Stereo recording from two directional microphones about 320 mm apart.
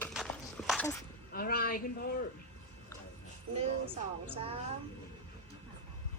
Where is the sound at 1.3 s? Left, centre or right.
Left.